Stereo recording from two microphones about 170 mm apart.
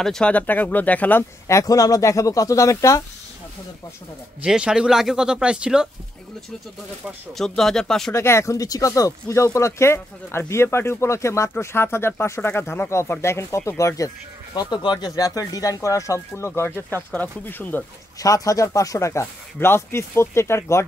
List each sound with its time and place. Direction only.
0.0 s speech: 5° left (ahead or behind)
4.4 s speech: 5° right (ahead or behind)
7.3 s speech: centre (ahead or behind)
8.1 s speech: 15° left (ahead or behind)